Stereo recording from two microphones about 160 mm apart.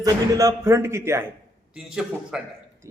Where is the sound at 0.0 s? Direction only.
20° right (ahead or behind).